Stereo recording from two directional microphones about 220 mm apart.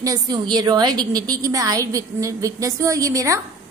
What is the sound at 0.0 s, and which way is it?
A woman's voice, 15° right (ahead or behind).